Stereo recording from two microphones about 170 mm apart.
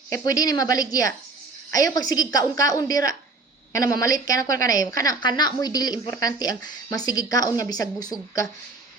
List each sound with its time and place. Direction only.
0.1 s a woman's voice: 20° left (ahead or behind)